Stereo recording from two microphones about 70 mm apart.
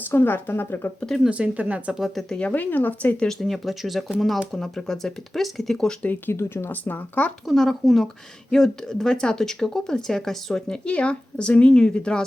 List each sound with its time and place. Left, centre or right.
0.1 s speech: left
0.9 s speech: centre
1.2 s speech: centre
2.3 s speech: centre
3.2 s speech: centre
6.0 s speech: left
7.4 s speech: centre